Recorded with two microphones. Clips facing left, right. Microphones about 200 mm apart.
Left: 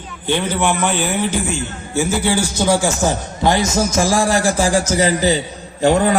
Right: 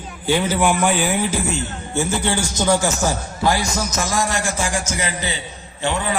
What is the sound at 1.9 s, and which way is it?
A man's voice, 5° left (ahead or behind).